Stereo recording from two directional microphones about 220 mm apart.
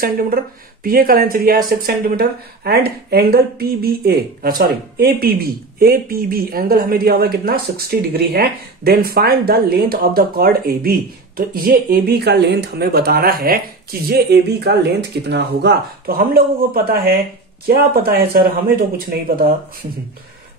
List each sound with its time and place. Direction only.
0.0 s speech: 40° right (ahead or behind)